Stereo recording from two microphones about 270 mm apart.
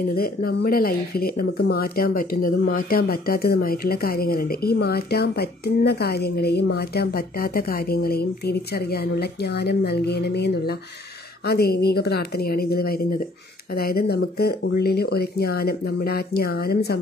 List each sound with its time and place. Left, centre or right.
0.1 s speech: left